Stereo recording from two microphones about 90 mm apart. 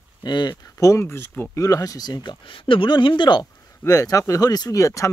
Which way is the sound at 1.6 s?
40° left (ahead or behind).